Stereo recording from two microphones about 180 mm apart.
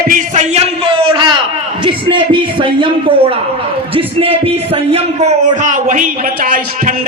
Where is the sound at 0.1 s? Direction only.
40° right (ahead or behind).